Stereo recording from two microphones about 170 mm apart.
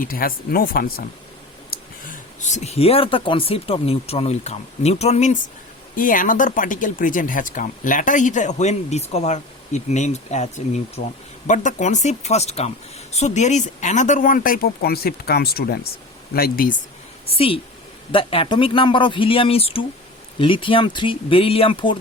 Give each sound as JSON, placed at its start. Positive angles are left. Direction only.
{"t": 0.0, "sound": "speech", "side_deg": 55}
{"t": 2.0, "sound": "speech", "side_deg": 45}
{"t": 6.0, "sound": "speech", "side_deg": 55}
{"t": 17.2, "sound": "speech", "side_deg": 35}